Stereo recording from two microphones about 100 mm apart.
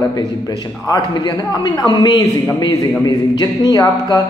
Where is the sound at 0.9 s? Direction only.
45° left (ahead or behind).